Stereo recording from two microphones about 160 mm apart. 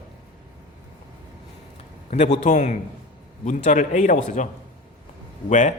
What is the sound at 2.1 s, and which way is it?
A man's voice, 45° left (ahead or behind).